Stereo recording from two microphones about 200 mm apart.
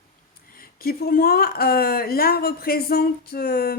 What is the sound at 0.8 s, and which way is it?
Speech, 50° left (ahead or behind).